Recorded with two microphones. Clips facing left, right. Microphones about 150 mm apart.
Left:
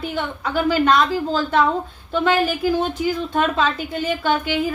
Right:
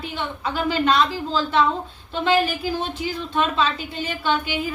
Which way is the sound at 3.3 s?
50° left (ahead or behind).